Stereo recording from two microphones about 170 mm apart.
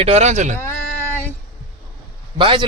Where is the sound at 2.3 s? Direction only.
30° right (ahead or behind).